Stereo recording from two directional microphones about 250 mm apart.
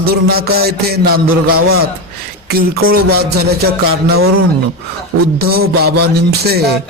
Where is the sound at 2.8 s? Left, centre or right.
Right.